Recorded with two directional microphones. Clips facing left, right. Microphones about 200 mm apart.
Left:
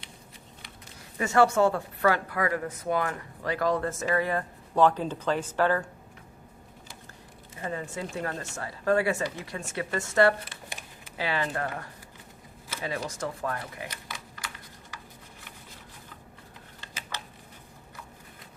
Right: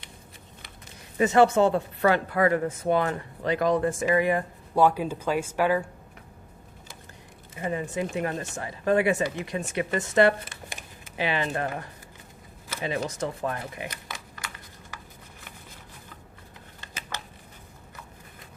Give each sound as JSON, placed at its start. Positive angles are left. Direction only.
{"t": 1.2, "sound": "speech", "side_deg": -20}
{"t": 7.6, "sound": "speech", "side_deg": -15}